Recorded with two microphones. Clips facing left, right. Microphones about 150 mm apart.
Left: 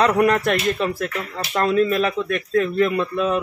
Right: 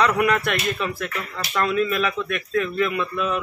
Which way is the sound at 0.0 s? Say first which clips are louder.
Left 3 dB; 40° left (ahead or behind).